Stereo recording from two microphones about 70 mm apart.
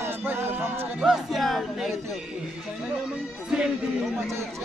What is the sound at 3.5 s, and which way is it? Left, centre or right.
Speech, centre.